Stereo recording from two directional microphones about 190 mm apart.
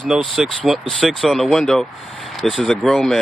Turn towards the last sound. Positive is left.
turn(degrees=0)  # may be behind; listen again after turning